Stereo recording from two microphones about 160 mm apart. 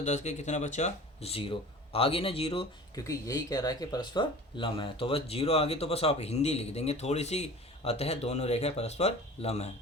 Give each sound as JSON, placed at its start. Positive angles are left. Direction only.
{"t": 0.0, "sound": "speech", "side_deg": 45}
{"t": 2.9, "sound": "speech", "side_deg": 20}